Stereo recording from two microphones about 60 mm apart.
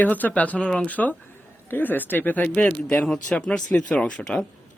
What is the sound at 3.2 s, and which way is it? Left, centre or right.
Speech, centre.